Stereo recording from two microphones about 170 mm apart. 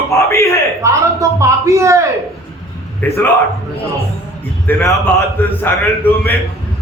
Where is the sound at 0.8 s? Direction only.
15° right (ahead or behind).